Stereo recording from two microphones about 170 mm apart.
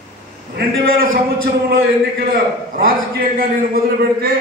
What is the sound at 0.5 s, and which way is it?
Speech, 60° right (ahead or behind).